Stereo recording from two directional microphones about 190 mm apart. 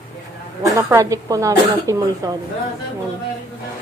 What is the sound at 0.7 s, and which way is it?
Speech, 15° right (ahead or behind).